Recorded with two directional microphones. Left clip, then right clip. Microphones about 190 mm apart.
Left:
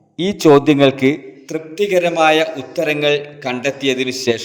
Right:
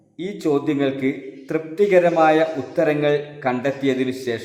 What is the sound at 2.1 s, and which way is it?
A man's voice, 35° left (ahead or behind).